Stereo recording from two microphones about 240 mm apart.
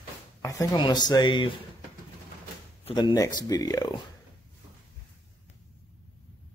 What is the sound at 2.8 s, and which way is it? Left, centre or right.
A man's voice, centre.